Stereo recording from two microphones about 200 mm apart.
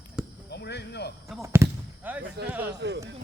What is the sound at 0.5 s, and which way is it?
Speech, 55° left (ahead or behind).